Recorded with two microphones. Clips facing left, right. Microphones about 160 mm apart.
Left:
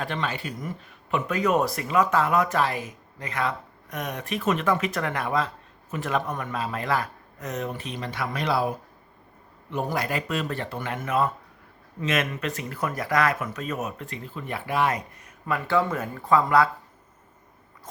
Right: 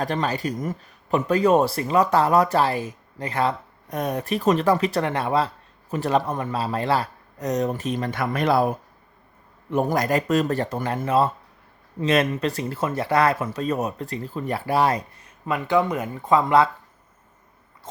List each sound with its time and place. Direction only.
0.0 s speech: 40° right (ahead or behind)
15.4 s speech: 20° right (ahead or behind)